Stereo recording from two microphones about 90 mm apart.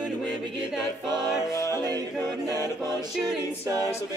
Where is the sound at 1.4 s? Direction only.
35° left (ahead or behind).